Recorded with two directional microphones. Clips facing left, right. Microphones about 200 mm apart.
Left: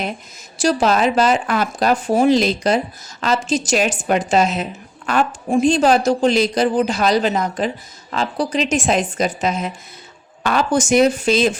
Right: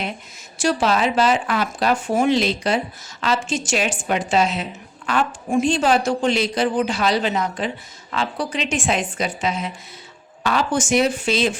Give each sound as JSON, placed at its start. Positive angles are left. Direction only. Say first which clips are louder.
{"t": 0.6, "sound": "speech", "louder": "left 3 dB", "side_deg": 40}